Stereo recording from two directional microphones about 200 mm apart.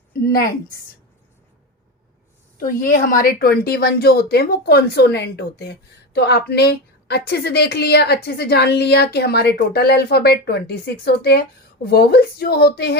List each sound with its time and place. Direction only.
0.1 s a woman's voice: 50° left (ahead or behind)
2.6 s a woman's voice: 45° left (ahead or behind)